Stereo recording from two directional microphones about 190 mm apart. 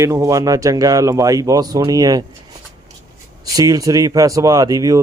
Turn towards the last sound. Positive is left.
turn(degrees=-20)  # may be behind; listen again after turning